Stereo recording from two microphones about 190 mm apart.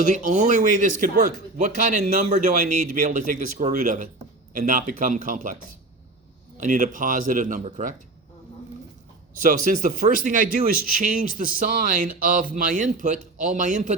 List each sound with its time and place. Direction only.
0.0 s a man's voice: 40° right (ahead or behind)
6.6 s speech: 40° right (ahead or behind)
9.4 s speech: 45° right (ahead or behind)